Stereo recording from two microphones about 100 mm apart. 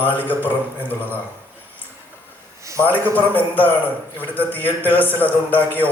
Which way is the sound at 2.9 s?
15° left (ahead or behind).